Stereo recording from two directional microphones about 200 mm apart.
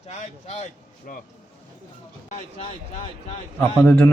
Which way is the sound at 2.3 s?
35° left (ahead or behind).